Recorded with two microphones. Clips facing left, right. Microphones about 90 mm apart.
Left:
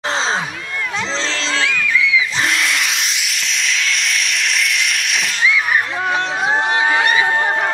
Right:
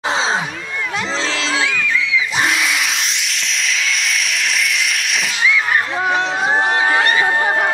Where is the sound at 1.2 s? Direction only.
35° left (ahead or behind).